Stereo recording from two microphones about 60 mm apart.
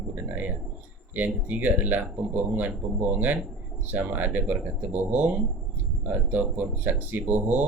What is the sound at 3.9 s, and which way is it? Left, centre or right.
Speech, right.